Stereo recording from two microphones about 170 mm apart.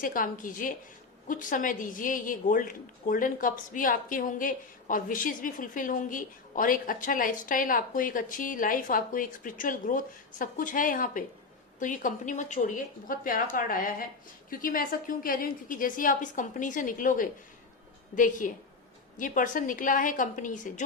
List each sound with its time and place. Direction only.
0.0 s a woman's voice: 55° left (ahead or behind)